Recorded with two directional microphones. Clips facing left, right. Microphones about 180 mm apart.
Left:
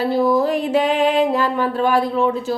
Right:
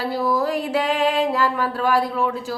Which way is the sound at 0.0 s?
25° left (ahead or behind).